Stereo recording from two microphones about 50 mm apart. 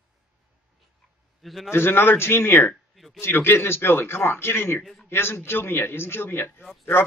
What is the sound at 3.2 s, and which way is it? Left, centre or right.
Speech, left.